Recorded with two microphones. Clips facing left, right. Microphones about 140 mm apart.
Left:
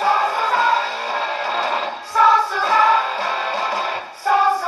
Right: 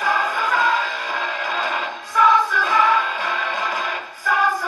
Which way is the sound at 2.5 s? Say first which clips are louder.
Left 2 dB; 35° left (ahead or behind).